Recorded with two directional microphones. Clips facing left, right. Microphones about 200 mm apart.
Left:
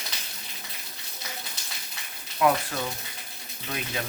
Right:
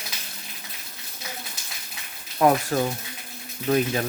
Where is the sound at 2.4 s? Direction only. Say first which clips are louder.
Right 4 dB; 40° right (ahead or behind).